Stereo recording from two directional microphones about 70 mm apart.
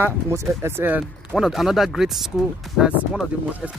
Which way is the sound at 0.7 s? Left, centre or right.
Right.